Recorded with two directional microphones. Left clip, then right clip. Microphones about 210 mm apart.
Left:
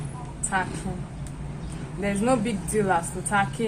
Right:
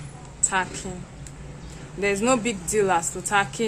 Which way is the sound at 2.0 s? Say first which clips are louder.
Right 3 dB; 45° right (ahead or behind).